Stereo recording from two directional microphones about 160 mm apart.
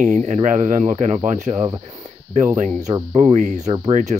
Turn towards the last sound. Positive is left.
turn(degrees=-45)  # may be behind; listen again after turning